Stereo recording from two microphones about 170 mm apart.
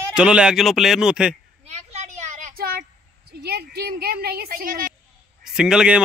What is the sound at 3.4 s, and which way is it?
Speech, 70° right (ahead or behind).